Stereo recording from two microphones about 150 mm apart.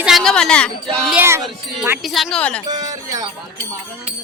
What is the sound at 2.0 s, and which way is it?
Speech, centre (ahead or behind).